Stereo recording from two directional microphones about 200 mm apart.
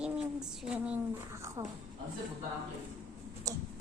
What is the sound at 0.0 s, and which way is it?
A woman's voice, 5° right (ahead or behind).